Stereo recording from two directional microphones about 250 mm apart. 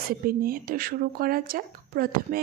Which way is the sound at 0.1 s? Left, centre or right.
Right.